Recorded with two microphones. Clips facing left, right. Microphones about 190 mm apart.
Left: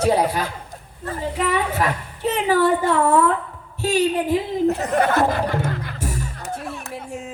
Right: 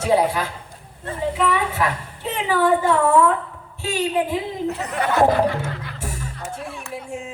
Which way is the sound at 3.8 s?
40° left (ahead or behind).